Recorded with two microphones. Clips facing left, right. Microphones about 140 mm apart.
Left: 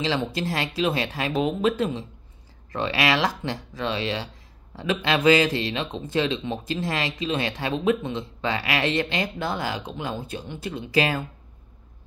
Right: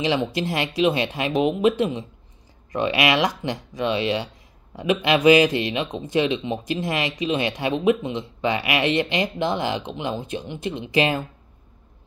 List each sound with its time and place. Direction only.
0.0 s a man's voice: 15° right (ahead or behind)